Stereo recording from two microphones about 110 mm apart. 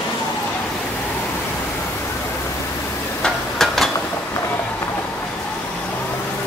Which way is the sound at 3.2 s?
5° left (ahead or behind).